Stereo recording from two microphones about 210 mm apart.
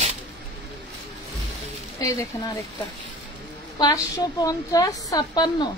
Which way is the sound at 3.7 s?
20° left (ahead or behind).